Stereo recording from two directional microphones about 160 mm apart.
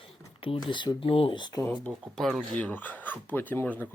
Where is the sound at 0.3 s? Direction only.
35° left (ahead or behind).